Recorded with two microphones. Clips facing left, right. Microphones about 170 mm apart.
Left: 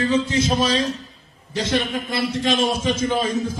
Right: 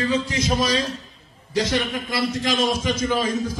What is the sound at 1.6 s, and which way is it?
Speech, 10° right (ahead or behind).